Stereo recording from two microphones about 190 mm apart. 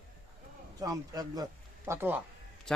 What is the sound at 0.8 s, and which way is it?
A man's voice, 20° right (ahead or behind).